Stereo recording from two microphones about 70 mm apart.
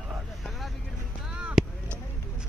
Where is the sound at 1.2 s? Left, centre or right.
Centre.